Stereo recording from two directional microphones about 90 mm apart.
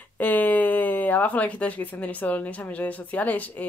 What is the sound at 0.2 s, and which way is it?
Speech, 20° left (ahead or behind).